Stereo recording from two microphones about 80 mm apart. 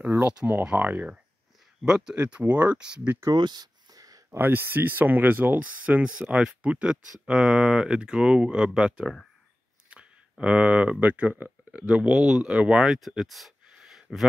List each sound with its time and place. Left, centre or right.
0.0 s speech: right
1.8 s speech: centre
3.3 s a sound: right
4.3 s speech: right
10.4 s speech: centre
11.8 s speech: centre